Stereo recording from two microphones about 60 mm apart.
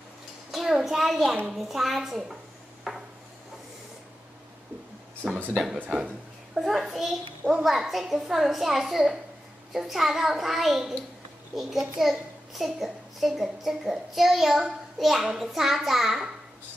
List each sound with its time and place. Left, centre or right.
0.5 s a sound: centre
0.8 s a child's voice: centre
2.9 s wood: centre
5.2 s speech: right
6.5 s a child's voice: centre